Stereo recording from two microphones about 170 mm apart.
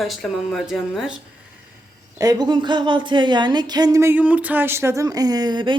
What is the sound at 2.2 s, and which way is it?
Speech, 25° right (ahead or behind).